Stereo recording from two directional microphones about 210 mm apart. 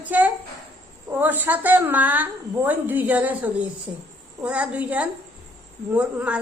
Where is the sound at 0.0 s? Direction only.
5° right (ahead or behind).